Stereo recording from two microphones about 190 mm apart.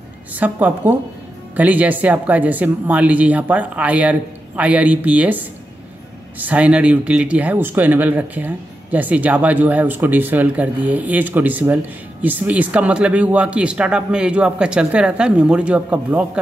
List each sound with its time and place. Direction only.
0.3 s speech: 10° right (ahead or behind)